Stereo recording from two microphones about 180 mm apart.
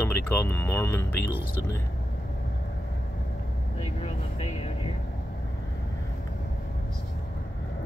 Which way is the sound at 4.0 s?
35° left (ahead or behind).